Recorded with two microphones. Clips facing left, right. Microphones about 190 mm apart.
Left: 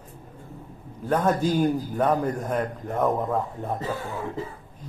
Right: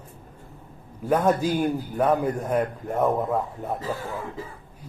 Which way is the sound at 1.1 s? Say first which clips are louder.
Right 1 dB; 10° right (ahead or behind).